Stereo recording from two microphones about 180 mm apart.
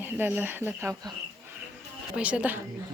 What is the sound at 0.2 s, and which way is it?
Speech, 10° right (ahead or behind).